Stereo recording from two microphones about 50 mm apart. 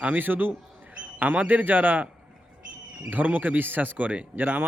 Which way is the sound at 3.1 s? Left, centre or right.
Right.